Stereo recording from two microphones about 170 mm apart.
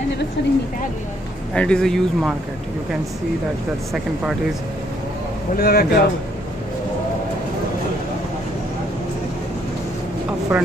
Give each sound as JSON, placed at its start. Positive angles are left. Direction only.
{"t": 0.4, "sound": "a sound", "side_deg": 85}
{"t": 1.5, "sound": "speech", "side_deg": 5}
{"t": 5.6, "sound": "speech", "side_deg": 65}
{"t": 10.5, "sound": "speech", "side_deg": -5}